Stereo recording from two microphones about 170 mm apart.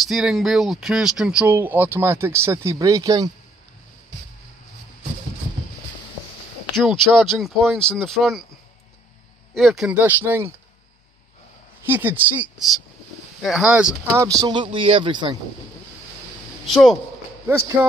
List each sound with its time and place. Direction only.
0.0 s speech: centre (ahead or behind); by 3.3 s 20° right (ahead or behind)
6.7 s speech: centre (ahead or behind)
9.5 s speech: centre (ahead or behind)
11.8 s speech: 10° right (ahead or behind)
14.2 s speech: 20° right (ahead or behind)
16.6 s speech: centre (ahead or behind)
17.5 s speech: 15° right (ahead or behind)